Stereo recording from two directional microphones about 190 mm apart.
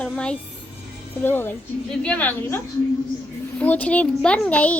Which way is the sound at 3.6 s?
10° left (ahead or behind).